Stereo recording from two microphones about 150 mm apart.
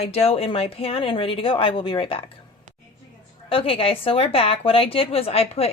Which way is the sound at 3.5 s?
40° left (ahead or behind).